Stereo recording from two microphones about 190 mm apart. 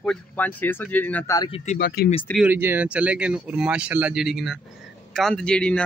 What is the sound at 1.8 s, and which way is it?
Speech, 55° left (ahead or behind).